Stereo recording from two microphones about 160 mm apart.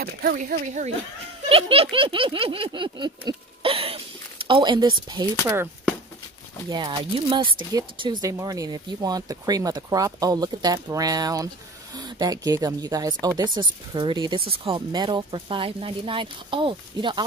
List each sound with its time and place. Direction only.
0.0 s speech: 65° right (ahead or behind)
1.5 s speech: 35° right (ahead or behind)
6.7 s speech: 30° right (ahead or behind)